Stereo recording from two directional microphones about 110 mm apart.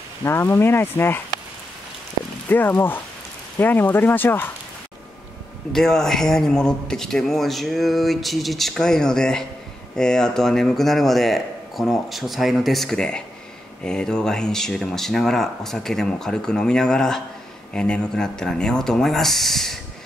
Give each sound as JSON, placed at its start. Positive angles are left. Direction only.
{"t": 0.2, "sound": "speech", "side_deg": 25}
{"t": 2.5, "sound": "speech", "side_deg": 20}
{"t": 5.7, "sound": "speech", "side_deg": 5}